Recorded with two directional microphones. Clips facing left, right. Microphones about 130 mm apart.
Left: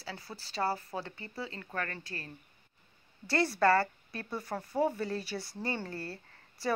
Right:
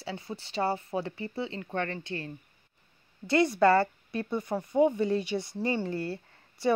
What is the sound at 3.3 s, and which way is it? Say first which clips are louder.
Speech: right 4 dB; 20° right (ahead or behind).